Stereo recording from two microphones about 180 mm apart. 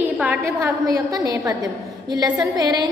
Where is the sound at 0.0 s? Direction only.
10° right (ahead or behind).